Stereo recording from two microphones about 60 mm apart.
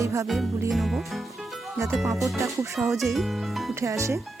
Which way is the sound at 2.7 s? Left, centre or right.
Centre.